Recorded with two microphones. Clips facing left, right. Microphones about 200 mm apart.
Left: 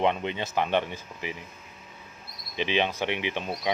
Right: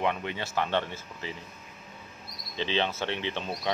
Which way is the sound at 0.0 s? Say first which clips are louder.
Left 4 dB; 20° left (ahead or behind).